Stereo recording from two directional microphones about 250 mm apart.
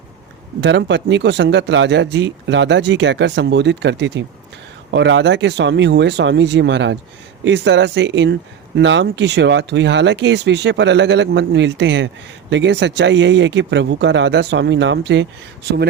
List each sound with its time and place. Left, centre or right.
0.6 s speech: right